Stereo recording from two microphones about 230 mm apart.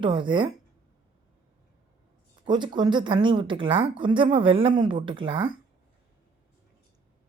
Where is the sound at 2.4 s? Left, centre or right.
Centre.